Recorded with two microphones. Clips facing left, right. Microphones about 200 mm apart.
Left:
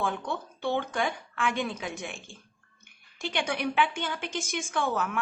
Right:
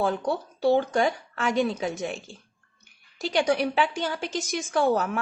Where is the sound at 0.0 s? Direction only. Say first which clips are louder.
Right 6 dB; 40° right (ahead or behind).